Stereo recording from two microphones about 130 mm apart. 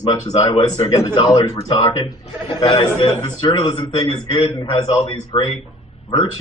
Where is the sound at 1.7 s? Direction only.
45° left (ahead or behind).